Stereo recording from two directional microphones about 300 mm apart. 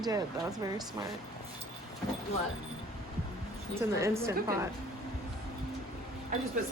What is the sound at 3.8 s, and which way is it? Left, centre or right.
Speech, centre.